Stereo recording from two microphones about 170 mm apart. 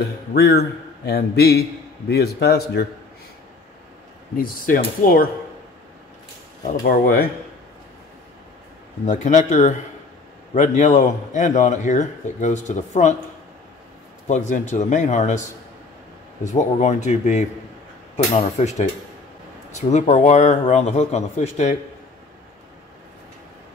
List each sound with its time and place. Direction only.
0.3 s a man's voice: 70° left (ahead or behind)
4.4 s speech: 55° left (ahead or behind)
6.9 s speech: 60° left (ahead or behind)
9.0 s a man's voice: 45° left (ahead or behind)
14.2 s a man's voice: 45° left (ahead or behind)
16.5 s a man's voice: 45° left (ahead or behind)